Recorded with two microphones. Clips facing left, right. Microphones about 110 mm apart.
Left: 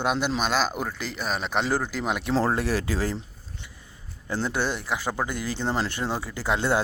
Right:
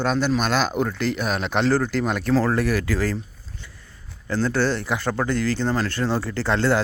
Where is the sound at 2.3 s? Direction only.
25° left (ahead or behind).